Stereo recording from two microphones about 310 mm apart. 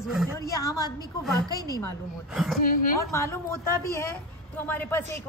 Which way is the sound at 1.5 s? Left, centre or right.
Centre.